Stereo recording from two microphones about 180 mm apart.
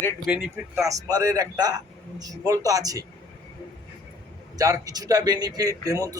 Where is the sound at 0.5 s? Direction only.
15° right (ahead or behind).